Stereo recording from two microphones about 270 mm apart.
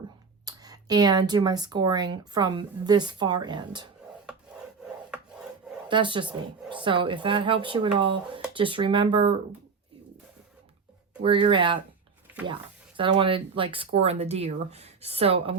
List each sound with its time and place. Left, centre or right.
0.4 s speech: centre
5.9 s speech: centre
11.2 s speech: centre
13.0 s speech: centre